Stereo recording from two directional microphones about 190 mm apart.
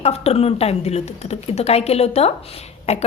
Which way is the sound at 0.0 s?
30° left (ahead or behind).